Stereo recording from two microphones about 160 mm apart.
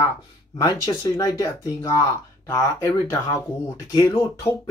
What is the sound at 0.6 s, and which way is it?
Speech, 25° left (ahead or behind).